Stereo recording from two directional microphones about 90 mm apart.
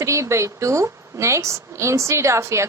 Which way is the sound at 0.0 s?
35° right (ahead or behind).